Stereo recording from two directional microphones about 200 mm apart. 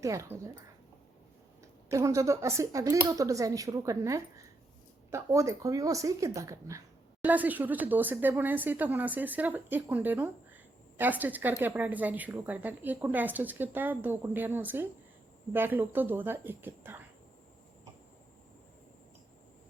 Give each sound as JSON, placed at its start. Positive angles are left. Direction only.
{"t": 0.0, "sound": "speech", "side_deg": -15}
{"t": 1.9, "sound": "speech", "side_deg": -15}